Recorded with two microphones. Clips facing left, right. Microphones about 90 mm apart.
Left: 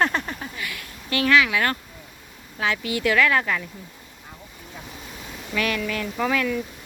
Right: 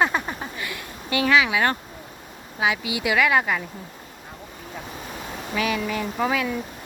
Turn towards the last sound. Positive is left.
turn(degrees=-20)  # may be behind; listen again after turning